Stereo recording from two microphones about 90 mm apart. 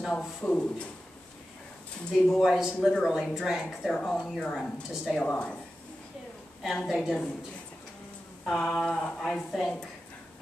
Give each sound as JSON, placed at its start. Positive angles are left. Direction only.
{"t": 0.0, "sound": "speech", "side_deg": 5}
{"t": 2.2, "sound": "speech", "side_deg": 0}
{"t": 4.0, "sound": "speech", "side_deg": 15}
{"t": 6.6, "sound": "speech", "side_deg": 0}
{"t": 8.5, "sound": "speech", "side_deg": 5}